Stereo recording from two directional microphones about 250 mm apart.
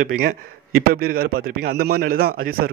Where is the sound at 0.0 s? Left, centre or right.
Right.